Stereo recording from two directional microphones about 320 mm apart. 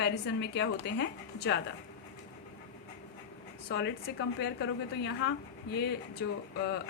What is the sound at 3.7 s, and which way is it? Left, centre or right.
A woman's voice, left.